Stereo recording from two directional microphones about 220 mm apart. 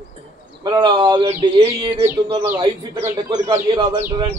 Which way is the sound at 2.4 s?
10° right (ahead or behind).